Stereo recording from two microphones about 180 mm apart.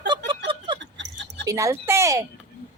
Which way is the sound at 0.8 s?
85° right.